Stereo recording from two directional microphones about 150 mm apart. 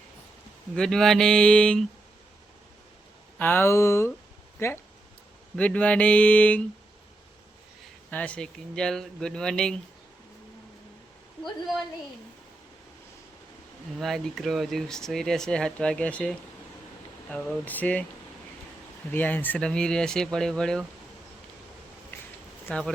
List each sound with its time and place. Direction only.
0.8 s speech: 5° left (ahead or behind)
3.3 s speech: 15° left (ahead or behind)
8.1 s speech: 10° left (ahead or behind)
14.0 s speech: centre (ahead or behind)
19.1 s speech: 10° left (ahead or behind)
22.7 s speech: 10° left (ahead or behind)